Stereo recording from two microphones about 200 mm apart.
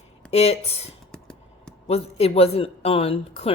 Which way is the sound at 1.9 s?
30° left (ahead or behind).